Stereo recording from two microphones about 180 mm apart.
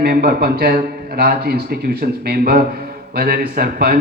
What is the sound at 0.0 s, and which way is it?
A man's voice, 60° right (ahead or behind).